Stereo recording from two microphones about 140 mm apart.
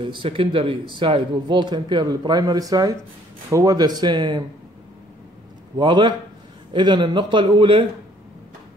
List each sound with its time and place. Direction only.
0.0 s speech: 40° right (ahead or behind)
5.8 s speech: 35° right (ahead or behind)